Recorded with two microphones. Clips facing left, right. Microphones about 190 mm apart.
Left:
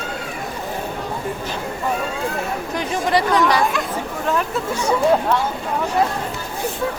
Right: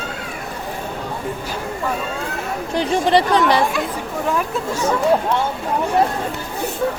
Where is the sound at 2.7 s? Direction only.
30° right (ahead or behind).